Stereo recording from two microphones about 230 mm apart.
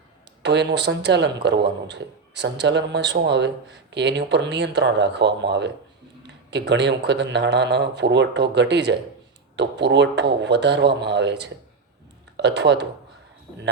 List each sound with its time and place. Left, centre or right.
0.4 s a man's voice: right